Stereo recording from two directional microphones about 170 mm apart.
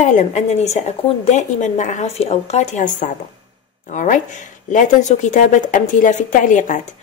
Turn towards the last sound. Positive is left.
turn(degrees=50)  # may be behind; listen again after turning